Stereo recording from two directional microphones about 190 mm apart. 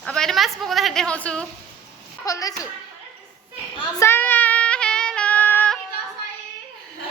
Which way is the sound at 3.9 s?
10° left (ahead or behind).